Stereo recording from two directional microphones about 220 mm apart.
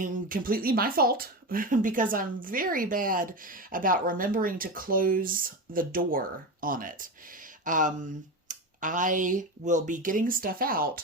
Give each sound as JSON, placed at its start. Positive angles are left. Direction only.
{"t": 0.0, "sound": "speech", "side_deg": -35}